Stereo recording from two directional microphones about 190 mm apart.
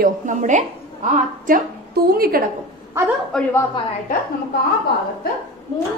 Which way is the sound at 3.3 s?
5° left (ahead or behind).